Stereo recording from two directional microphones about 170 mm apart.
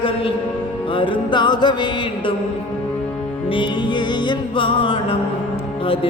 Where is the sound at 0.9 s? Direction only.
30° left (ahead or behind).